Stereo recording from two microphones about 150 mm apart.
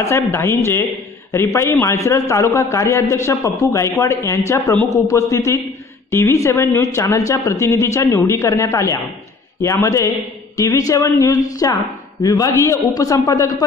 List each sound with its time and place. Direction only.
0.0 s speech: 20° left (ahead or behind)